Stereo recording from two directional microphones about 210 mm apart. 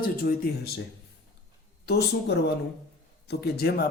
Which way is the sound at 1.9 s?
50° left (ahead or behind).